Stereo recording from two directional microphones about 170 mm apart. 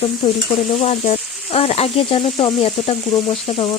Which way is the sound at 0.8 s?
35° left (ahead or behind).